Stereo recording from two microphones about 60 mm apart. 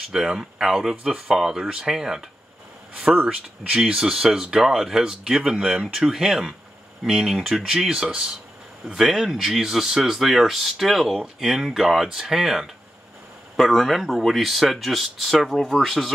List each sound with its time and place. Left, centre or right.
0.1 s speech: centre
2.9 s speech: right
3.3 s speech: centre